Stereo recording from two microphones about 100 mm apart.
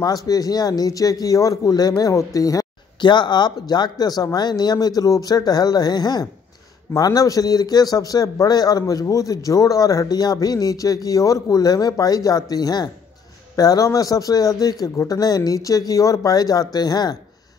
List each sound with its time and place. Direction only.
0.0 s a man's voice: 40° left (ahead or behind)
3.0 s a man's voice: 50° left (ahead or behind)